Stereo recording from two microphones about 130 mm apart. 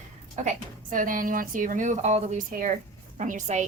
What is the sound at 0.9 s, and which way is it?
A woman's voice, 90° right.